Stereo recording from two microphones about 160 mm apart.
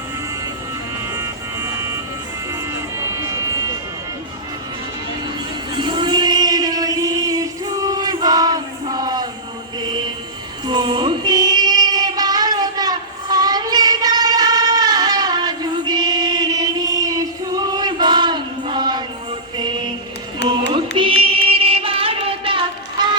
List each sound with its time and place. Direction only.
1.1 s music: 15° right (ahead or behind)
2.5 s vehicle: 15° right (ahead or behind)
5.7 s a sound: 30° right (ahead or behind)
10.7 s child singing: 30° right (ahead or behind)
20.5 s carnatic music: 30° right (ahead or behind)